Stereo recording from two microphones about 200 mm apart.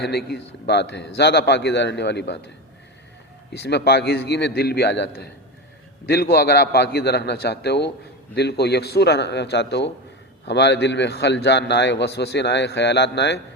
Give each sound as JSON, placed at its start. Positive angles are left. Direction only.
{"t": 0.0, "sound": "a man's voice", "side_deg": 55}
{"t": 3.5, "sound": "a man's voice", "side_deg": 55}
{"t": 6.3, "sound": "a man's voice", "side_deg": 55}